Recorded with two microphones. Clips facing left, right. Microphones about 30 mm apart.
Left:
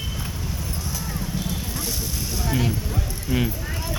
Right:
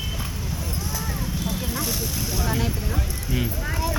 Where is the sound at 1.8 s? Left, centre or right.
Centre.